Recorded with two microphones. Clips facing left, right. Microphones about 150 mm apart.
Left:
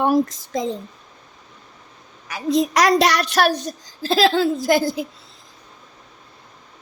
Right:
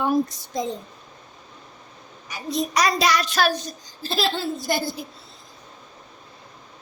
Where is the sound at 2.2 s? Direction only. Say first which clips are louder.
Left 7 dB; 90° left.